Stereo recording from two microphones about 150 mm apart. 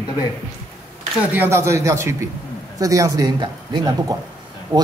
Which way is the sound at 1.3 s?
15° right (ahead or behind).